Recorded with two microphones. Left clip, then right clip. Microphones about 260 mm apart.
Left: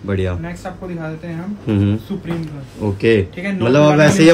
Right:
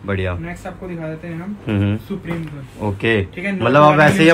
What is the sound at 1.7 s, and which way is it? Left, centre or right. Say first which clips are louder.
A man's voice: left 3 dB; centre.